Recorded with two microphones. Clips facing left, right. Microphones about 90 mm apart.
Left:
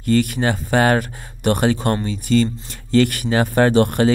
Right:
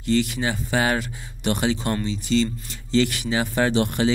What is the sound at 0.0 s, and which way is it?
Speech, 50° left (ahead or behind).